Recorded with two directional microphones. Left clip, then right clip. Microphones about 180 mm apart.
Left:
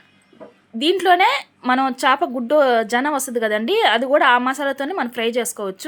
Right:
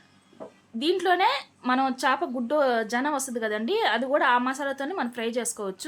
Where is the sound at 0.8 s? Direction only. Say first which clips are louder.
Left 8 dB; 20° left (ahead or behind).